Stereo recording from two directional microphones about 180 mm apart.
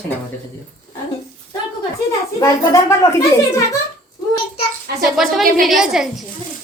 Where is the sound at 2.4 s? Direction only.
15° left (ahead or behind).